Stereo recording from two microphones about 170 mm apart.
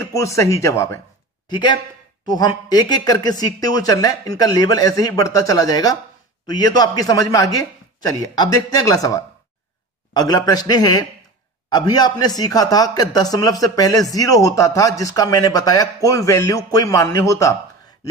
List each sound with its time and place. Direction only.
0.0 s speech: 15° left (ahead or behind)
1.5 s a man's voice: 25° left (ahead or behind)